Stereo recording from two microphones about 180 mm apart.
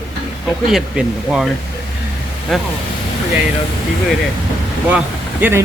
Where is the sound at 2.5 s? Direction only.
Centre (ahead or behind).